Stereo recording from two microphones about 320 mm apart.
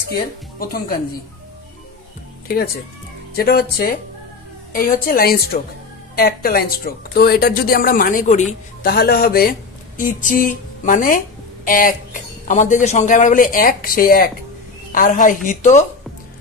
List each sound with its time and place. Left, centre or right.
0.1 s speech: left
2.4 s speech: left